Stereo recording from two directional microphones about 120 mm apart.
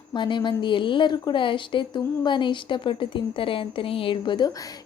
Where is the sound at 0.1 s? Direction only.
40° left (ahead or behind).